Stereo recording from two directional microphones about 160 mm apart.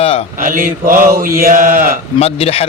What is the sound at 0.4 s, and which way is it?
Mantra, 60° right (ahead or behind).